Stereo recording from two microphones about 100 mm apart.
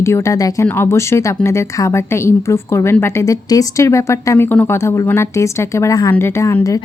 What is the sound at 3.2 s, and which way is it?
Speech, 35° left (ahead or behind).